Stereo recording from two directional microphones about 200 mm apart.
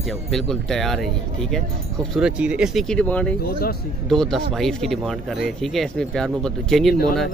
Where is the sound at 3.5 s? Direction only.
50° left (ahead or behind).